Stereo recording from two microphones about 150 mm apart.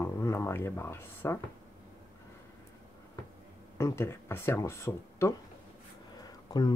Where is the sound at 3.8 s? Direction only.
15° left (ahead or behind).